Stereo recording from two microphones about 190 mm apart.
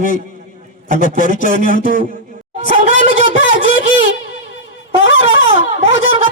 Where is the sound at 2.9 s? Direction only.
85° left.